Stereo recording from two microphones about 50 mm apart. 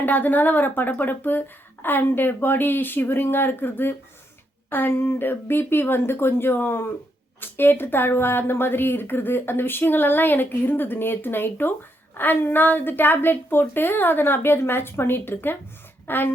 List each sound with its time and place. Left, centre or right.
0.0 s speech: left